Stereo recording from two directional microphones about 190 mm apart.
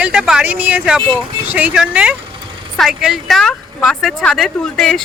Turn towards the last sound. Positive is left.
turn(degrees=5)  # may be behind; listen again after turning